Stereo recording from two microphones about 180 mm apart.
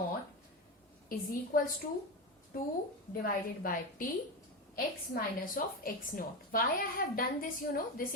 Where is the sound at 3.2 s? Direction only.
50° left (ahead or behind).